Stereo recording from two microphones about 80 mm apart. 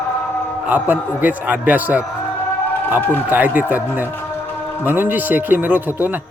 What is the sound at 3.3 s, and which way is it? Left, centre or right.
Speech, right.